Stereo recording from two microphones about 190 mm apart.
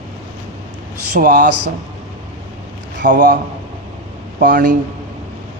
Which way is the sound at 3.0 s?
50° right (ahead or behind).